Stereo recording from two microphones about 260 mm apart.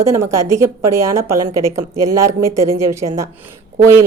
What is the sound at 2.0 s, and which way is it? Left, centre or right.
Speech, centre.